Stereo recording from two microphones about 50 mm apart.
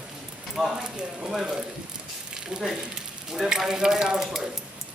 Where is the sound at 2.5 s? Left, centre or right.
Centre.